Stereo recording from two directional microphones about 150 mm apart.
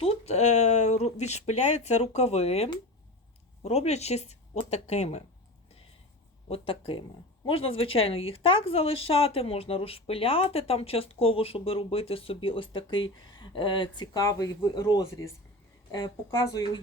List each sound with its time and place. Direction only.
0.0 s speech: 45° left (ahead or behind)
6.5 s speech: 35° left (ahead or behind)